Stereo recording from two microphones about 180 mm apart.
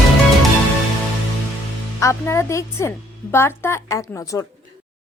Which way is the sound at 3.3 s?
15° left (ahead or behind).